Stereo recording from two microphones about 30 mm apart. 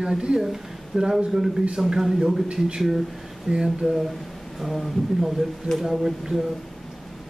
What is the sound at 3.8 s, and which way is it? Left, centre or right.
Speech, centre.